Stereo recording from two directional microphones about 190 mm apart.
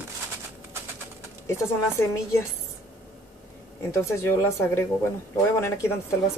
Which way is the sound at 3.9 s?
15° left (ahead or behind).